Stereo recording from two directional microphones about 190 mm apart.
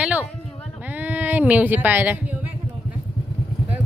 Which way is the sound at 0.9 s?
10° right (ahead or behind).